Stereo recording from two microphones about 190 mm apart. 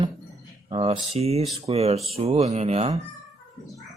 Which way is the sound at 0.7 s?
30° right (ahead or behind).